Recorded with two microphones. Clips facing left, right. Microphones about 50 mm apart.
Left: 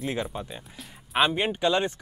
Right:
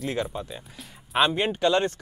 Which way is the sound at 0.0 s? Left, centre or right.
Centre.